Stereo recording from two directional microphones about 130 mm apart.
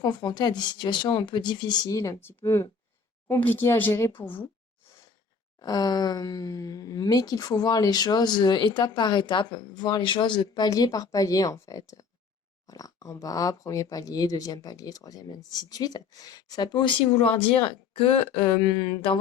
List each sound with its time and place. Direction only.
0.0 s speech: 30° left (ahead or behind); by 4.1 s 15° left (ahead or behind)
5.5 s speech: 30° left (ahead or behind)